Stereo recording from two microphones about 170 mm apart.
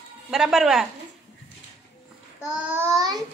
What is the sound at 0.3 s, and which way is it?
Speech, 5° right (ahead or behind).